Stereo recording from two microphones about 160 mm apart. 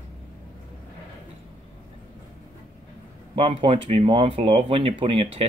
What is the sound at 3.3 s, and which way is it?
Speech, 35° right (ahead or behind).